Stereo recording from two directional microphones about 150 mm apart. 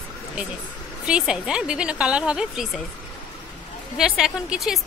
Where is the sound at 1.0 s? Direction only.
5° right (ahead or behind).